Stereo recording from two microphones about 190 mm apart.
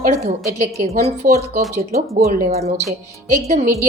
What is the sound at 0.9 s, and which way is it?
A woman's voice, 35° right (ahead or behind).